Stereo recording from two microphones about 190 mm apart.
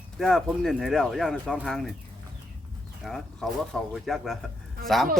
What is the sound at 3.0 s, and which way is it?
Speech, centre (ahead or behind).